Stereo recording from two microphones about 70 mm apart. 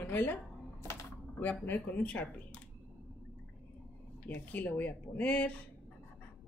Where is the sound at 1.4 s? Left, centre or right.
Left.